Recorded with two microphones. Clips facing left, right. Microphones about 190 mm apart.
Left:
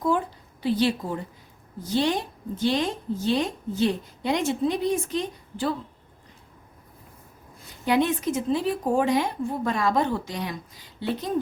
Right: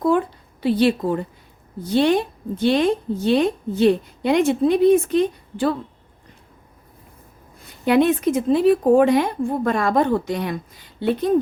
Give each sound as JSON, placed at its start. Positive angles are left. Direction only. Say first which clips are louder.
{"t": 0.0, "sound": "a sound", "louder": "right 6 dB", "side_deg": -65}
{"t": 1.8, "sound": "speech", "louder": "right 7 dB", "side_deg": -60}
{"t": 7.9, "sound": "speech", "louder": "right 6 dB", "side_deg": -60}